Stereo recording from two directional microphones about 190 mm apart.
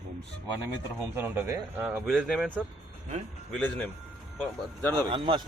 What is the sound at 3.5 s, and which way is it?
A man's voice, 5° left (ahead or behind).